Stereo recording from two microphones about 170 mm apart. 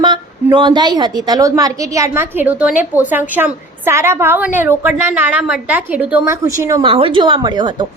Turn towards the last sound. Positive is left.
turn(degrees=-25)  # may be behind; listen again after turning